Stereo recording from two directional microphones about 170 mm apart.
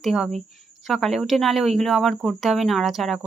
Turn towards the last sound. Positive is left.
turn(degrees=0)  # may be behind; listen again after turning